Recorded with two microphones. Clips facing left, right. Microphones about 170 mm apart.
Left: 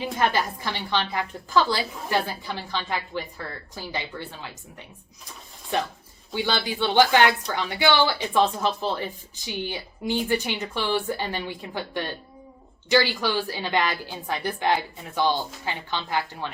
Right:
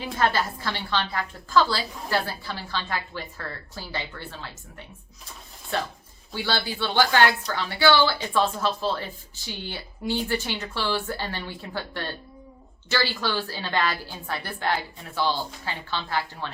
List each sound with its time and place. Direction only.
0.0 s a woman's voice: 15° left (ahead or behind)
5.7 s a woman's voice: 15° left (ahead or behind)